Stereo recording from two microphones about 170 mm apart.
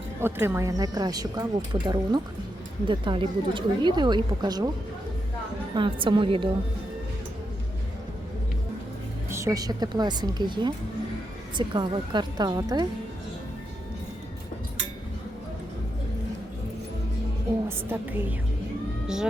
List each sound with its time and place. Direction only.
0.2 s speech: 15° right (ahead or behind)
5.7 s speech: 30° right (ahead or behind)
9.3 s speech: 20° right (ahead or behind)
17.7 s a woman's voice: 10° right (ahead or behind)